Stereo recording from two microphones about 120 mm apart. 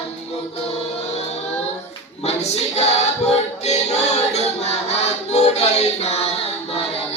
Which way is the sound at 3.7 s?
65° left (ahead or behind).